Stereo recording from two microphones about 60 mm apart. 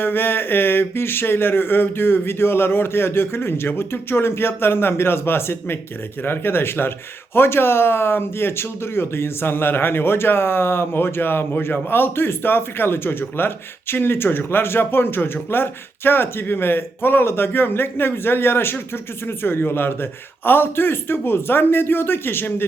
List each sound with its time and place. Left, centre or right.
0.0 s speech: left